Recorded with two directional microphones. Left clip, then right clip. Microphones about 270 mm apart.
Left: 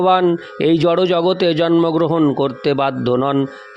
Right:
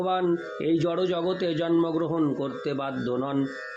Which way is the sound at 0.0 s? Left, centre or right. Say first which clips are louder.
Left 11 dB; left.